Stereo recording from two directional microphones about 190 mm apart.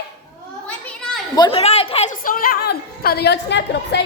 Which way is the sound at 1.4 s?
25° left (ahead or behind).